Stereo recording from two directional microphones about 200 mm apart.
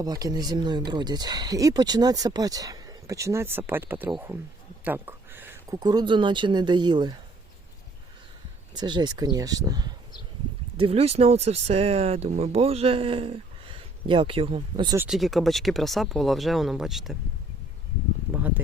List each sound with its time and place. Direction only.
0.0 s speech: 20° right (ahead or behind)
8.7 s speech: 20° right (ahead or behind)
10.8 s speech: 30° right (ahead or behind)
14.9 s speech: 5° right (ahead or behind)
18.3 s speech: 10° right (ahead or behind)